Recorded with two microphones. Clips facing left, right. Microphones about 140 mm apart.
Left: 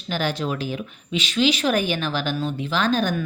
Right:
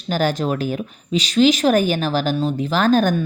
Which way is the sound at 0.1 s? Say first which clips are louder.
Right 5 dB; 45° right (ahead or behind).